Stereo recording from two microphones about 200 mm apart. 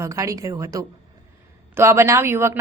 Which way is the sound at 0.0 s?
15° right (ahead or behind).